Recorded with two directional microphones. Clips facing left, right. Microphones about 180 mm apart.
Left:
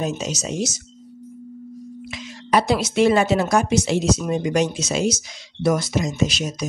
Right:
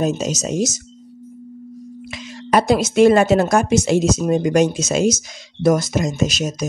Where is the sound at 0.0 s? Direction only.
40° right (ahead or behind).